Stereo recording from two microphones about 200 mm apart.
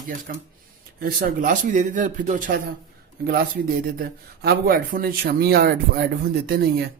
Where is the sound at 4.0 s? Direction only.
50° right (ahead or behind).